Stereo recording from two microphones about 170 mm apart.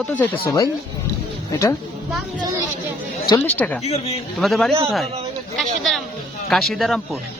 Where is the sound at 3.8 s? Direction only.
40° left (ahead or behind).